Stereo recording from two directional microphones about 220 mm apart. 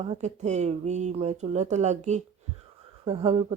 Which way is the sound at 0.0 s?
30° right (ahead or behind).